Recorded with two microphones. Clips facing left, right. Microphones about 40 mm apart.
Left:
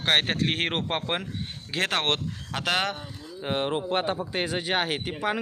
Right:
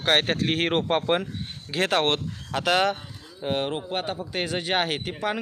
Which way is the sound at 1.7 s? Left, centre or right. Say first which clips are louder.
Right 4 dB; left.